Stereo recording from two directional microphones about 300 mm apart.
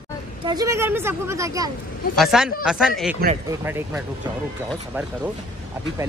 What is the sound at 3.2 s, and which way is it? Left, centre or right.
Speech, right.